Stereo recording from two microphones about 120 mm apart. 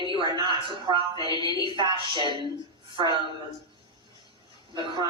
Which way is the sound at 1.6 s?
40° right (ahead or behind).